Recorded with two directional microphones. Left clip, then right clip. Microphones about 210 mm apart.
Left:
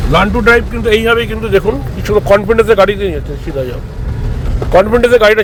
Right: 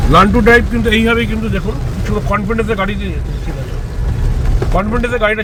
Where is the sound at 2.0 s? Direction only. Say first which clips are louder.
Left 9 dB; 55° left (ahead or behind).